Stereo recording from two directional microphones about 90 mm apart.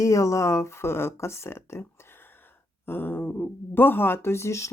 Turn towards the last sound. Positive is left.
turn(degrees=35)  # may be behind; listen again after turning